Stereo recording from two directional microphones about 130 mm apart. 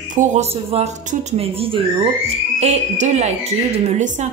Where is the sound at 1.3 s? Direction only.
50° right (ahead or behind).